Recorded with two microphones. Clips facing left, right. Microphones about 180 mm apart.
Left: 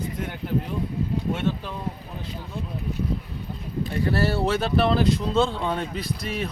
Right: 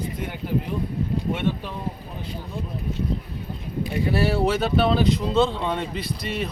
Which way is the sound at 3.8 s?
15° right (ahead or behind).